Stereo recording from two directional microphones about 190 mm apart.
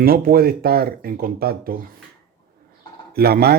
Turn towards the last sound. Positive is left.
turn(degrees=-55)  # may be behind; listen again after turning